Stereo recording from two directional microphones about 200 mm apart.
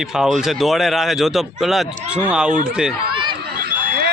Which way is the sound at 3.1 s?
25° right (ahead or behind).